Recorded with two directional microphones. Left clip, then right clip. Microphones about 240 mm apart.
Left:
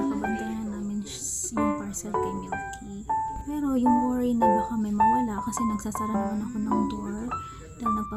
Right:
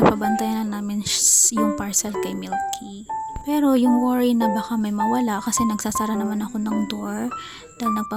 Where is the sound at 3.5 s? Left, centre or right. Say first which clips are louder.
Right 7 dB; right.